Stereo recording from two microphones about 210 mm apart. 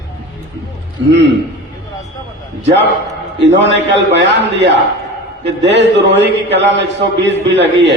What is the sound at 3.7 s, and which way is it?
A man's voice, 60° right (ahead or behind).